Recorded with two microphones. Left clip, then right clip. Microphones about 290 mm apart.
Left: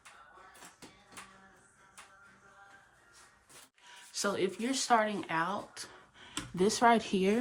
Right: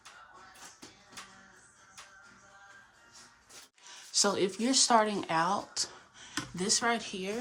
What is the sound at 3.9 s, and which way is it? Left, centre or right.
Speech, centre.